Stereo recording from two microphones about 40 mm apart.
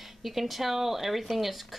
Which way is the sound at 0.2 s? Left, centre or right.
Centre.